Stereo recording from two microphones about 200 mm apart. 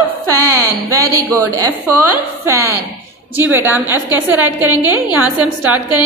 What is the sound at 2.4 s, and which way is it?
A woman's voice, 15° right (ahead or behind).